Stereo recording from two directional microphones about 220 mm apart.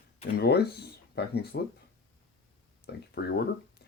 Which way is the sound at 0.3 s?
45° left (ahead or behind).